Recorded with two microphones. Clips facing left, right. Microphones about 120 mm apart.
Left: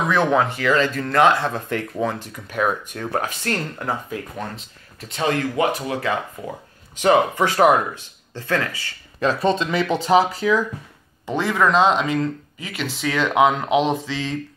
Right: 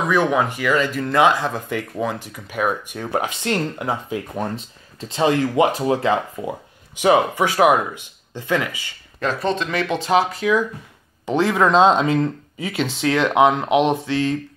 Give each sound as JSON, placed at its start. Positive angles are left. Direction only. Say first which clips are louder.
{"t": 0.1, "sound": "speech", "louder": "even", "side_deg": -10}
{"t": 5.0, "sound": "speech", "louder": "right 4 dB", "side_deg": -25}
{"t": 7.0, "sound": "speech", "louder": "even", "side_deg": -10}
{"t": 9.2, "sound": "speech", "louder": "left 2 dB", "side_deg": 5}
{"t": 11.2, "sound": "speech", "louder": "right 2 dB", "side_deg": -20}